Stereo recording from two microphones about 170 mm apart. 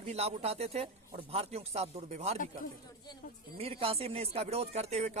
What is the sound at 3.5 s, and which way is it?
Speech, 35° right (ahead or behind).